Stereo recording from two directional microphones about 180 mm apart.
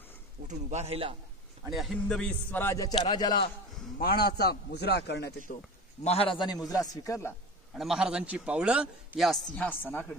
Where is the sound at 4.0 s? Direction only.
55° left (ahead or behind).